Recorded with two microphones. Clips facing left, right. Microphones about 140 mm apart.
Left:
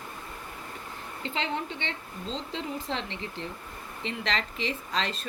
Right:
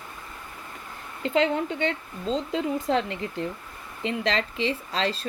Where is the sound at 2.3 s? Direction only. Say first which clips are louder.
Right 8 dB; 40° right (ahead or behind).